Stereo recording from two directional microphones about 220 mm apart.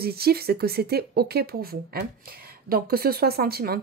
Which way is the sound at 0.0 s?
45° right (ahead or behind).